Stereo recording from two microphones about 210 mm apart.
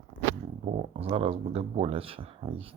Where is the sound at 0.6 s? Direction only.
30° right (ahead or behind).